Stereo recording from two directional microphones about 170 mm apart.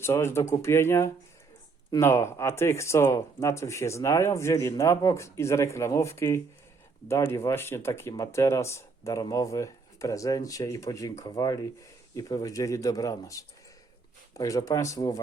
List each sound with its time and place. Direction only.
0.0 s speech: 15° left (ahead or behind)